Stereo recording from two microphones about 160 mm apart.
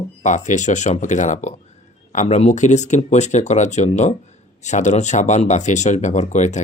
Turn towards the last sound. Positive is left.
turn(degrees=50)  # may be behind; listen again after turning